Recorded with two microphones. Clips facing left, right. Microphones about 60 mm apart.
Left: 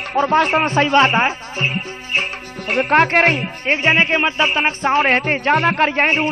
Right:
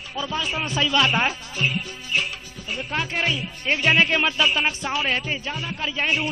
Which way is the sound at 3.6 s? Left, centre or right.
Left.